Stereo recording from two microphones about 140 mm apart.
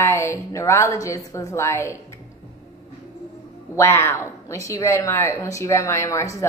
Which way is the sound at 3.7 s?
20° left (ahead or behind).